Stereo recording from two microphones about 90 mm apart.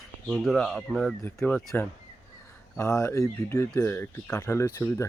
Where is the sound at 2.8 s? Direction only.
35° left (ahead or behind).